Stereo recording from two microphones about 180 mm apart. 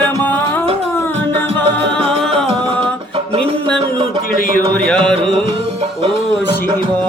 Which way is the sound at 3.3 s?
30° right (ahead or behind).